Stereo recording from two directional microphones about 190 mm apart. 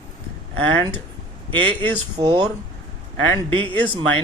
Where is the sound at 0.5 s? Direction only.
10° left (ahead or behind).